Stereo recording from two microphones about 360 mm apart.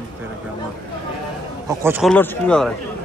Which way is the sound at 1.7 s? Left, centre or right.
Centre.